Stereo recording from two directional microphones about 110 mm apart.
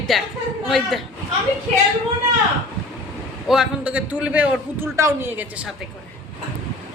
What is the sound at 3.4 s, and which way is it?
A man's voice, 5° right (ahead or behind).